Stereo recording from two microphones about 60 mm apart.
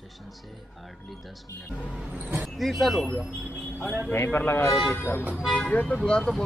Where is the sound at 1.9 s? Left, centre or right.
Right.